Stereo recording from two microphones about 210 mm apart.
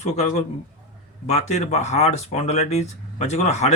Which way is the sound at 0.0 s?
30° left (ahead or behind).